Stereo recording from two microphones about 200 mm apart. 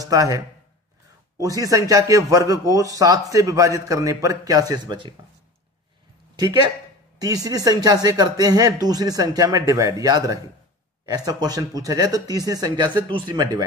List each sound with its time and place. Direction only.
0.0 s speech: 15° right (ahead or behind)
1.4 s speech: 15° right (ahead or behind)
6.3 s speech: 20° right (ahead or behind)